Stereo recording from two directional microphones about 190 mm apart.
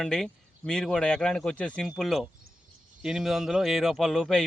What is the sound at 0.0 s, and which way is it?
Speech, 5° left (ahead or behind).